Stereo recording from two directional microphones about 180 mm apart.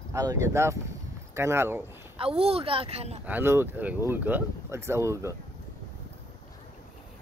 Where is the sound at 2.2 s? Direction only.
30° right (ahead or behind).